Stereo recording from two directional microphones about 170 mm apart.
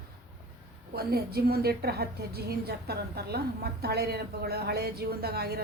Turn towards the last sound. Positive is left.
turn(degrees=-70)  # may be behind; listen again after turning